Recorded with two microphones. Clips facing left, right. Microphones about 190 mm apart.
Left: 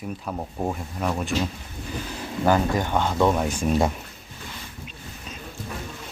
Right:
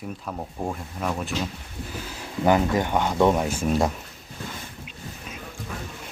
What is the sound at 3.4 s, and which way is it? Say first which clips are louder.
Speech: left 1 dB; 5° right (ahead or behind).